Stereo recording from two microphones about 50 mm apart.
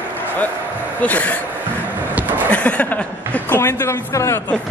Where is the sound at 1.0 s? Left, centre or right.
Left.